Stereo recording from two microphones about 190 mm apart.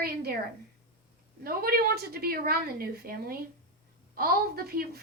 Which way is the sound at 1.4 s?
50° right (ahead or behind).